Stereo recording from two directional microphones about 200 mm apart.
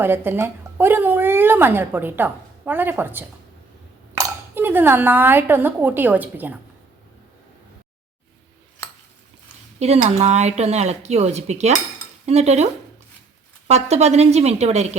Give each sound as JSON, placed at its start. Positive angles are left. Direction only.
{"t": 0.0, "sound": "a woman's voice", "side_deg": -10}
{"t": 9.7, "sound": "speech", "side_deg": -30}
{"t": 12.2, "sound": "cutlery", "side_deg": -35}
{"t": 13.7, "sound": "speech", "side_deg": -30}